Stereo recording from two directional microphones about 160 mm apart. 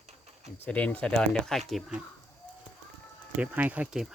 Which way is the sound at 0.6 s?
10° left (ahead or behind).